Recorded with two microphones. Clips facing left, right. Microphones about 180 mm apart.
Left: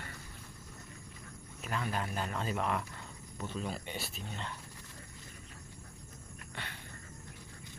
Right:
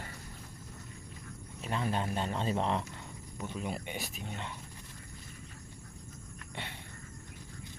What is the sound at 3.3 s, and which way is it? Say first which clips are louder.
Speech: right 1 dB; 15° right (ahead or behind).